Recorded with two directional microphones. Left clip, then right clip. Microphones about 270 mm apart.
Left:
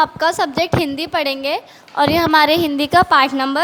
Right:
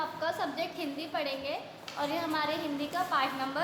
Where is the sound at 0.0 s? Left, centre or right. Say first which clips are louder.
Left 17 dB; left.